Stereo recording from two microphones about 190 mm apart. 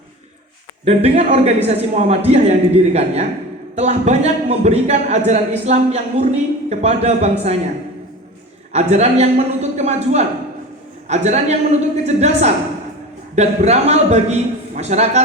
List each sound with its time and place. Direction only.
0.9 s speech: 35° right (ahead or behind)
8.7 s speech: 35° right (ahead or behind)